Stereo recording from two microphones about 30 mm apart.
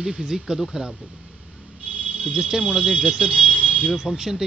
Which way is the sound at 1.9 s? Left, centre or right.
Right.